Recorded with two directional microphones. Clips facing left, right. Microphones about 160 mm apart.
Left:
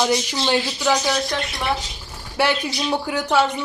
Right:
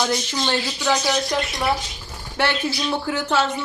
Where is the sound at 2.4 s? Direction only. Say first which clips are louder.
Left 1 dB; 10° left (ahead or behind).